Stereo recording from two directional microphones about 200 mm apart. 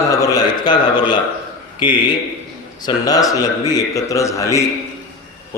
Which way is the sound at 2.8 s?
20° left (ahead or behind).